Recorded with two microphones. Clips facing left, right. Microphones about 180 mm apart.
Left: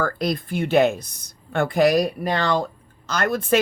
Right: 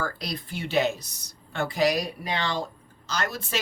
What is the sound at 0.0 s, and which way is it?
A woman's voice, 50° left (ahead or behind).